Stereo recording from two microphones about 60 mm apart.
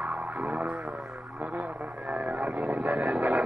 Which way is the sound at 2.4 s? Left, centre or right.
Right.